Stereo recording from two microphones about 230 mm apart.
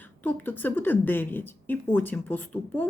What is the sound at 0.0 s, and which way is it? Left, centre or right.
A woman's voice, centre.